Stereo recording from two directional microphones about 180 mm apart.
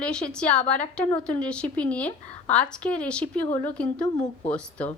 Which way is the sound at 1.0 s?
45° left (ahead or behind).